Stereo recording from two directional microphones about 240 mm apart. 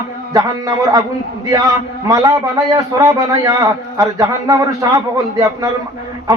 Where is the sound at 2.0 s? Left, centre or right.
Centre.